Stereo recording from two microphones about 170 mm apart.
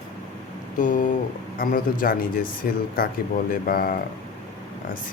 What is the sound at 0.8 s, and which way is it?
Speech, 50° left (ahead or behind).